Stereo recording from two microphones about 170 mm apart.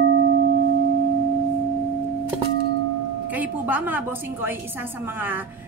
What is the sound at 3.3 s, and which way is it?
A woman's voice, 10° right (ahead or behind).